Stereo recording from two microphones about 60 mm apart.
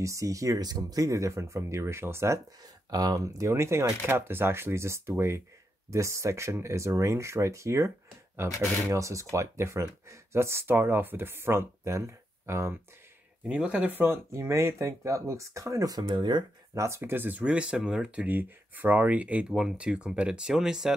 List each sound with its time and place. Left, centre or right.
0.0 s speech: right
2.9 s speech: right
4.0 s speech: right
8.4 s speech: right
8.8 s speech: right
11.8 s speech: right
13.5 s speech: centre
13.9 s speech: right
14.3 s speech: right
16.7 s speech: right
17.0 s speech: right
17.4 s speech: centre